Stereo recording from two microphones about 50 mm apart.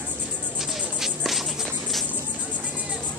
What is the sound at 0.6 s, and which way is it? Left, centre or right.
Music, centre.